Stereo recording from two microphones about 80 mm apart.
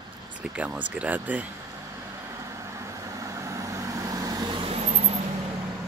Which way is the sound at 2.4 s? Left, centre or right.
Right.